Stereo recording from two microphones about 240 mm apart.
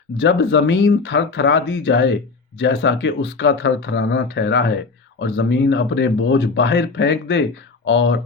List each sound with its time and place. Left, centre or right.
0.2 s speech: left